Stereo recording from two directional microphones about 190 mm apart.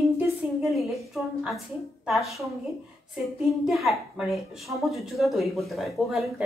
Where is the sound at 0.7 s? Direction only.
Centre (ahead or behind).